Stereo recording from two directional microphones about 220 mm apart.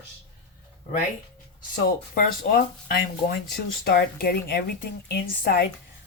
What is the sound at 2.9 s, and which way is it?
Speech, 45° left (ahead or behind).